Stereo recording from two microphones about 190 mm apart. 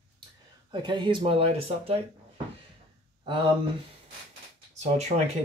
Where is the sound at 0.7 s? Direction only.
25° right (ahead or behind).